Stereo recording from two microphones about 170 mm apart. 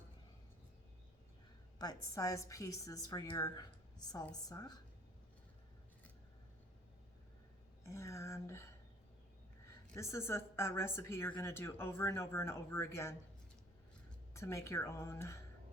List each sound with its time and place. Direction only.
1.8 s a woman's voice: 20° left (ahead or behind)
7.9 s a woman's voice: 15° left (ahead or behind)
9.9 s a woman's voice: 15° left (ahead or behind)
14.3 s a woman's voice: 15° left (ahead or behind)